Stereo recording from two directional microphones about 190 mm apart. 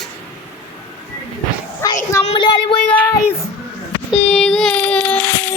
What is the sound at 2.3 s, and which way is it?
Speech, 25° left (ahead or behind).